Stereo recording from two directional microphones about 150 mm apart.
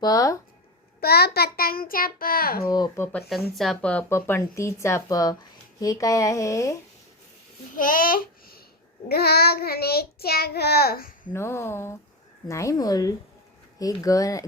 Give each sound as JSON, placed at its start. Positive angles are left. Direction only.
{"t": 0.0, "sound": "speech", "side_deg": 25}
{"t": 1.0, "sound": "a child's voice", "side_deg": 90}
{"t": 2.7, "sound": "speech", "side_deg": 25}
{"t": 3.2, "sound": "speech", "side_deg": 0}
{"t": 7.8, "sound": "babbling", "side_deg": 70}
{"t": 9.0, "sound": "child singing", "side_deg": 90}
{"t": 11.3, "sound": "speech", "side_deg": 15}